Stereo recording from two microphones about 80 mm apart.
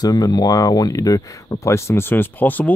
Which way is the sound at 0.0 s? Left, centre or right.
Left.